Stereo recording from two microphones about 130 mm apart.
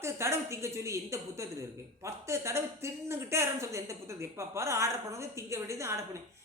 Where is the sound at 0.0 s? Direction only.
20° right (ahead or behind).